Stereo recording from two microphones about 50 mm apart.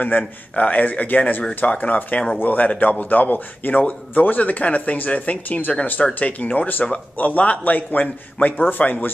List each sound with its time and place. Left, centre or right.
0.0 s speech: left